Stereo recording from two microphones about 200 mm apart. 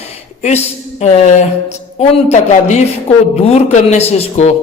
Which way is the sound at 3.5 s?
30° left (ahead or behind).